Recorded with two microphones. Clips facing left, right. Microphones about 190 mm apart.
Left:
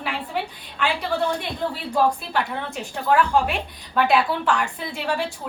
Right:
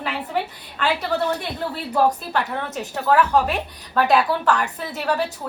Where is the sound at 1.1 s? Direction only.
40° right (ahead or behind).